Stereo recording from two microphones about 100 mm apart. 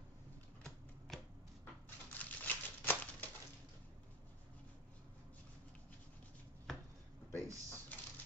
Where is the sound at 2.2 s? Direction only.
20° left (ahead or behind).